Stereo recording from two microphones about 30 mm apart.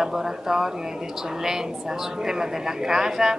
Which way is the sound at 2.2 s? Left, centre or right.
Centre.